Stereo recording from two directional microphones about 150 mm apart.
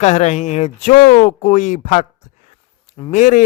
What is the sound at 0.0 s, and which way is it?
Speech, 50° left (ahead or behind).